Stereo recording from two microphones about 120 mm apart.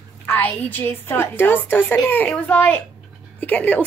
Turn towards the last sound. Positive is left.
turn(degrees=15)  # may be behind; listen again after turning